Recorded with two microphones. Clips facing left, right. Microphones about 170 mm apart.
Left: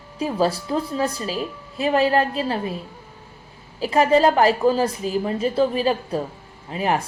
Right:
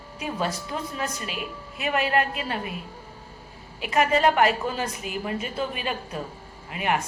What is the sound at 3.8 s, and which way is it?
A woman's voice, 35° left (ahead or behind).